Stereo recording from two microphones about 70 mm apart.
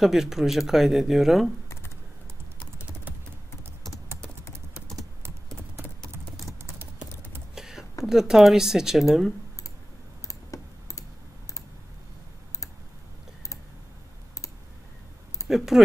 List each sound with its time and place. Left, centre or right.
0.0 s speech: centre
7.5 s a sound: centre
8.0 s speech: centre
10.2 s typing: left
15.4 s speech: centre